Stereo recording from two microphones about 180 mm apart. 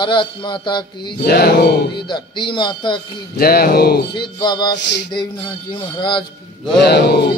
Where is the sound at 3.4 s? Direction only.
55° left (ahead or behind).